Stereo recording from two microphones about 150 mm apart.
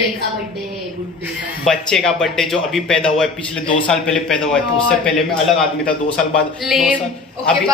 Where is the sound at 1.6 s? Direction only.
Centre (ahead or behind).